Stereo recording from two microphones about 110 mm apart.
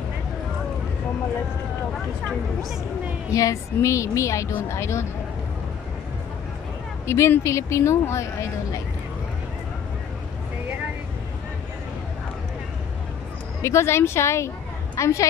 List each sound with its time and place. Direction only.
3.3 s speech: 30° left (ahead or behind)
7.1 s speech: 25° left (ahead or behind)
13.6 s speech: 25° left (ahead or behind)